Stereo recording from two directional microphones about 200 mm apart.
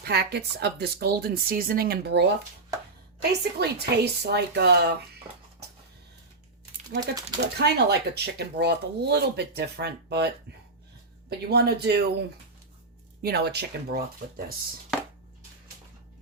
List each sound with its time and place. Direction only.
0.0 s speech: 55° right (ahead or behind)
7.0 s speech: 20° right (ahead or behind)
7.6 s speech: 55° right (ahead or behind)
13.2 s speech: 55° right (ahead or behind)